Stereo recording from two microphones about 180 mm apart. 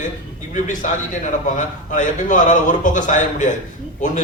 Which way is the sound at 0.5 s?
45° left (ahead or behind).